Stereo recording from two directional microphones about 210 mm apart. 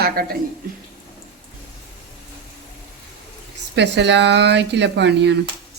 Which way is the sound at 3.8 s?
55° right (ahead or behind).